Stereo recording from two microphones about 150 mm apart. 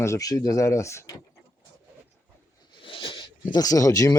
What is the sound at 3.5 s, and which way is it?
Speech, 25° left (ahead or behind).